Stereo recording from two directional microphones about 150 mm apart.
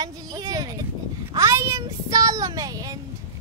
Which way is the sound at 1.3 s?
20° right (ahead or behind).